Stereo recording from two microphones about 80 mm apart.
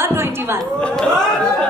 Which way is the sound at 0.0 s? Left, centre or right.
Right.